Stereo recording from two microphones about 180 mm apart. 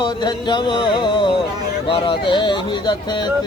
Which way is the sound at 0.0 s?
25° left (ahead or behind).